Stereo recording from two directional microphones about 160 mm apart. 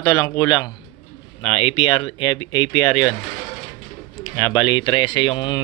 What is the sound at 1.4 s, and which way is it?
Speech, 40° left (ahead or behind).